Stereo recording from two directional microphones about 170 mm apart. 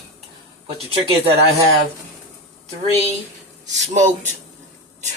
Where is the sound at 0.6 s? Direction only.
35° right (ahead or behind).